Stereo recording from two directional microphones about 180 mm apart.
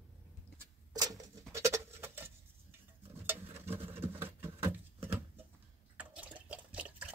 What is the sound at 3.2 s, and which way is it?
Patter, 10° right (ahead or behind).